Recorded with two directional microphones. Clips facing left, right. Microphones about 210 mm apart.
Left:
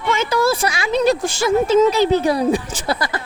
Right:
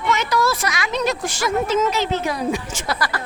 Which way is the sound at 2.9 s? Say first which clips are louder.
Left 1 dB; 25° left (ahead or behind).